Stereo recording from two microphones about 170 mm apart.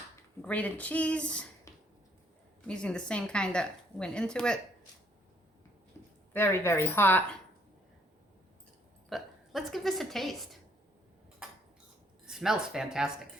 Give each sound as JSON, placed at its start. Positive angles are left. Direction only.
{"t": 0.4, "sound": "speech", "side_deg": 10}
{"t": 1.7, "sound": "a sound", "side_deg": 20}
{"t": 2.6, "sound": "speech", "side_deg": 5}
{"t": 6.3, "sound": "speech", "side_deg": 15}
{"t": 9.0, "sound": "speech", "side_deg": 0}
{"t": 12.2, "sound": "speech", "side_deg": -5}